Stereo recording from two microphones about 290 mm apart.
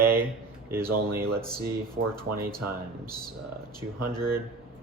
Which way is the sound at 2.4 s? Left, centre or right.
Centre.